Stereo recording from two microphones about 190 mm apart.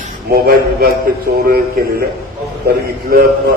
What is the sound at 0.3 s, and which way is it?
Speech, 55° right (ahead or behind).